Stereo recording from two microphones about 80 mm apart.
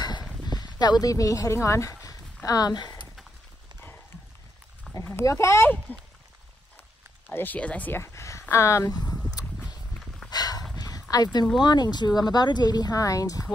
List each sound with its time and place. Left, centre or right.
0.5 s speech: left
2.7 s speech: left
4.9 s a sound: centre
5.2 s speech: left
7.2 s speech: left
8.0 s speech: left
10.3 s dog: left
11.6 s speech: left